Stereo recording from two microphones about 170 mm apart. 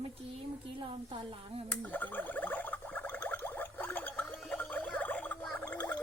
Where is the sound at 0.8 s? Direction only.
30° right (ahead or behind).